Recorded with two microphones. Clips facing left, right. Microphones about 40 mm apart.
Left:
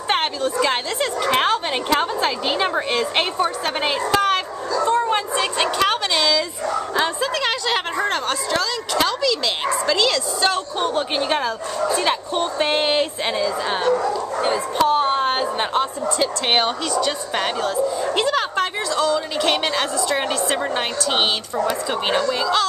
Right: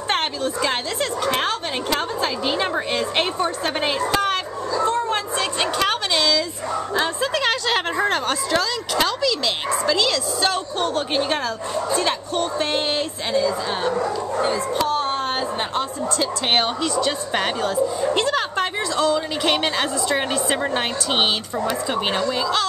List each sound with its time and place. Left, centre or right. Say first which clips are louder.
0.1 s a woman's voice: left 2 dB; centre
1.3 s a woman's voice: left 4 dB; left
4.8 s a sound: left 4 dB; centre
7.0 s a woman's voice: even; centre; by 13.7 s left
14.8 s a woman's voice: left 8 dB; centre
16.5 s speech: even; centre